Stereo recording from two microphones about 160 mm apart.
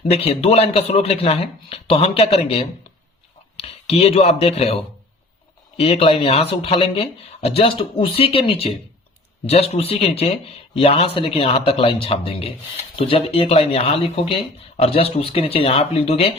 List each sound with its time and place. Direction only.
0.0 s speech: 40° left (ahead or behind)
5.8 s speech: 40° left (ahead or behind)